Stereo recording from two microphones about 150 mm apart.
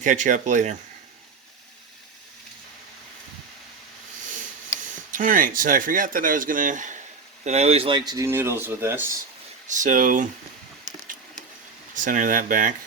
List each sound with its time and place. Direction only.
0.0 s speech: 55° right (ahead or behind)
4.9 s speech: 60° right (ahead or behind)
7.4 s speech: 45° right (ahead or behind); by 9.1 s 15° right (ahead or behind)
9.6 s speech: 60° right (ahead or behind)
10.8 s wood: 60° right (ahead or behind)
11.9 s speech: 60° right (ahead or behind)